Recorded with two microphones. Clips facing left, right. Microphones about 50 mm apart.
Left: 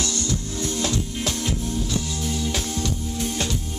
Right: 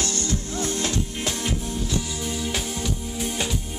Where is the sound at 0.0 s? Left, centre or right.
Right.